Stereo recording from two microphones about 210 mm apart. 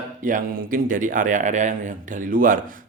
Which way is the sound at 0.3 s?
40° right (ahead or behind).